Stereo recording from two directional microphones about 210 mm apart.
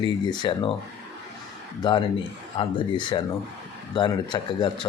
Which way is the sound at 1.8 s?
20° left (ahead or behind).